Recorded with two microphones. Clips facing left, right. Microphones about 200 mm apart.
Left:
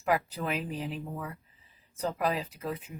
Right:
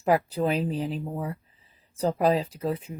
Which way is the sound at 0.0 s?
30° right (ahead or behind).